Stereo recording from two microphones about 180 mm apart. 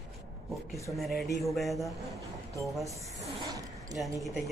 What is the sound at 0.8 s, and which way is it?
Speech, centre (ahead or behind).